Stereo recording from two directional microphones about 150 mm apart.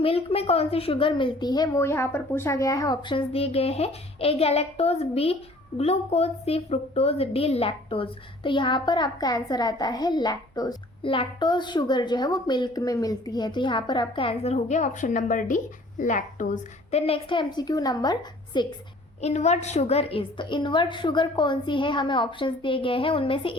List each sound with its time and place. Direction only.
0.0 s a woman's voice: 40° left (ahead or behind)
19.2 s a woman's voice: 50° left (ahead or behind)